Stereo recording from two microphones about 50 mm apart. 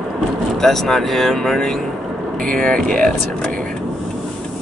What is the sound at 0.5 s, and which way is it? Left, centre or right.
Speech, centre.